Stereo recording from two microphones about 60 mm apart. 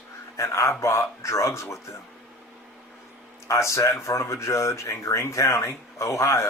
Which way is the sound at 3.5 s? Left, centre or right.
Left.